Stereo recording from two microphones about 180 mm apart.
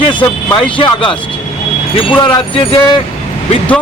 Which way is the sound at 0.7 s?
30° left (ahead or behind).